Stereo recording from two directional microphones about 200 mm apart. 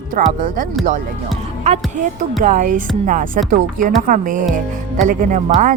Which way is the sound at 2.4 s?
40° right (ahead or behind).